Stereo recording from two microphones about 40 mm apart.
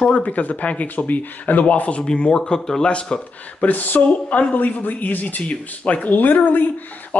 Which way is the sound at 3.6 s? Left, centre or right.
Left.